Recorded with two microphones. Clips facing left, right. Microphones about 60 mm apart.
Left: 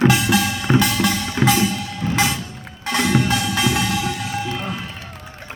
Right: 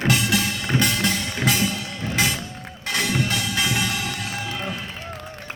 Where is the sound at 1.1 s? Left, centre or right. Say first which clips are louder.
Left 5 dB; left.